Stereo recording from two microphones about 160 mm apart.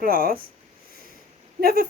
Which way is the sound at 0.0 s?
65° right (ahead or behind).